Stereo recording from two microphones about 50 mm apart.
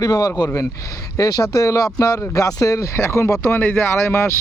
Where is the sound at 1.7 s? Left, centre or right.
Left.